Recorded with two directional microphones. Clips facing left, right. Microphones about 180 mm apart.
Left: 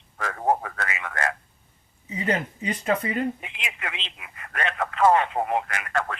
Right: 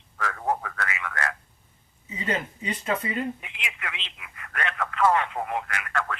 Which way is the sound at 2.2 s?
40° left (ahead or behind).